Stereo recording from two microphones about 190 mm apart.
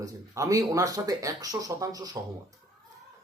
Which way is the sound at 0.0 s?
15° right (ahead or behind).